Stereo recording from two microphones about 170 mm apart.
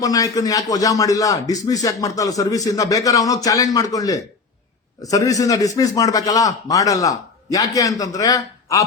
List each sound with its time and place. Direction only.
0.0 s speech: 20° left (ahead or behind)